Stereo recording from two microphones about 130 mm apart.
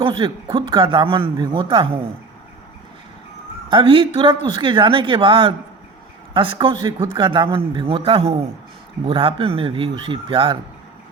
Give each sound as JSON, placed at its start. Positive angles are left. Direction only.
{"t": 0.0, "sound": "speech", "side_deg": -40}
{"t": 3.7, "sound": "a man's voice", "side_deg": -40}